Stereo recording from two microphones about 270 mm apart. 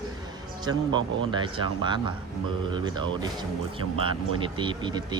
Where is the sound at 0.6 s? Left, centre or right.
Centre.